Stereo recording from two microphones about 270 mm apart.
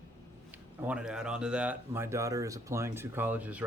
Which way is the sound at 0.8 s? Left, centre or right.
Centre.